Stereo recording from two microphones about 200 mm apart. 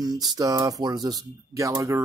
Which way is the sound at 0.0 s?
20° right (ahead or behind).